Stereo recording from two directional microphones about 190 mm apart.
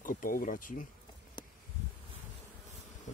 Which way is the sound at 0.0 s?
45° left (ahead or behind).